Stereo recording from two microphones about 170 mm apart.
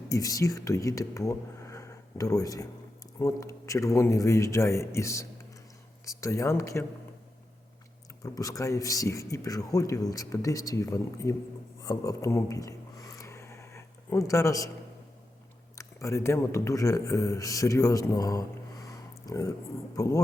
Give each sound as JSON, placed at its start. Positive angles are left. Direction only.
{"t": 0.1, "sound": "a man's voice", "side_deg": 20}
{"t": 8.2, "sound": "speech", "side_deg": 20}
{"t": 11.8, "sound": "a sound", "side_deg": 20}
{"t": 15.7, "sound": "a man's voice", "side_deg": 15}